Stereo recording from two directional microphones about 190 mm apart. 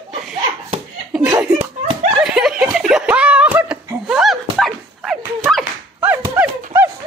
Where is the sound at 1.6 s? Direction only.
40° right (ahead or behind).